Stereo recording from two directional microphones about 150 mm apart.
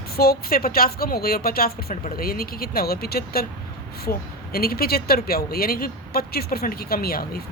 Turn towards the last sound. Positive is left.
turn(degrees=90)